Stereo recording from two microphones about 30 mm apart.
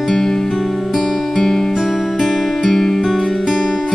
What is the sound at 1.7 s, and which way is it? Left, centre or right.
Music, centre.